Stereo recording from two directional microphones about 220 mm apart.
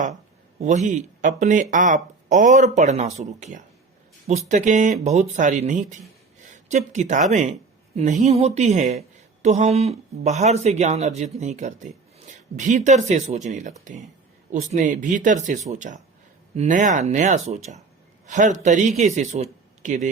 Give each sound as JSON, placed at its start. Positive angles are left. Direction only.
{"t": 0.6, "sound": "a woman's voice", "side_deg": -35}